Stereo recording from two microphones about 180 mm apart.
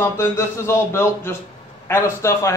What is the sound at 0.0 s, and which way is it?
Speech, 15° left (ahead or behind).